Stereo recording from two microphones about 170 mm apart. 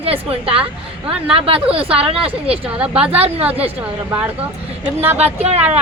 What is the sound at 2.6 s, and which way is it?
Speech, 5° right (ahead or behind).